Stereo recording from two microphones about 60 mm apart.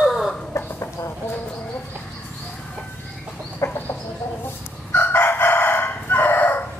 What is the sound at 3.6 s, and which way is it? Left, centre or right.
Chicken, left.